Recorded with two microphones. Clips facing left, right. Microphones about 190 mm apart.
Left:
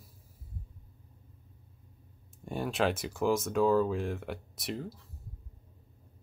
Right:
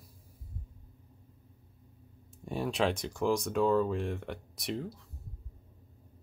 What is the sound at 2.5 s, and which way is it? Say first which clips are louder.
Speech: even; centre (ahead or behind).